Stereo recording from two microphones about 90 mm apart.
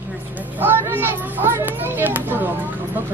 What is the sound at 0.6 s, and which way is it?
A child's voice, 25° right (ahead or behind).